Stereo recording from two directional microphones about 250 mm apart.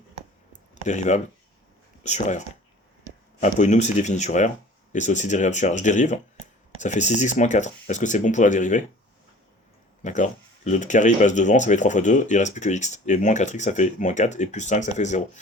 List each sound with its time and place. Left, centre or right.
0.9 s speech: left
3.4 s speech: left
10.0 s speech: left